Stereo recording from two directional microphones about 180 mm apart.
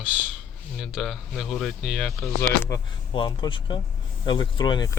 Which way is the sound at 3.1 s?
25° left (ahead or behind).